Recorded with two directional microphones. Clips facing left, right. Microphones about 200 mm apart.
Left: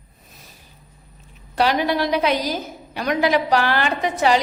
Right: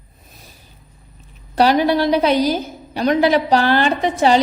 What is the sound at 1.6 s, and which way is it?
A woman's voice, 35° right (ahead or behind).